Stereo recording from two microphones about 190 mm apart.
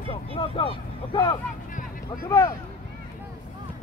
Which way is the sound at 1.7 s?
45° left (ahead or behind).